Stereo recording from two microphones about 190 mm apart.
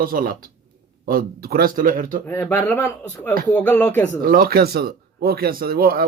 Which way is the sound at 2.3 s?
10° left (ahead or behind).